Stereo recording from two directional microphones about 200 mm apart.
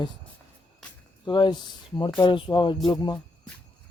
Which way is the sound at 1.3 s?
20° left (ahead or behind).